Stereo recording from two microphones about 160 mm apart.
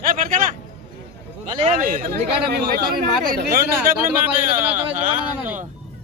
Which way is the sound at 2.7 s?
70° right (ahead or behind).